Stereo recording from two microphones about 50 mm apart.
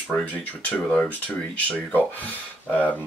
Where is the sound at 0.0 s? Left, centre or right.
Left.